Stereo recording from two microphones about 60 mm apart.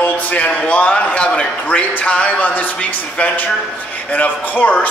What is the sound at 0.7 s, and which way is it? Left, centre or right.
A man's voice, left.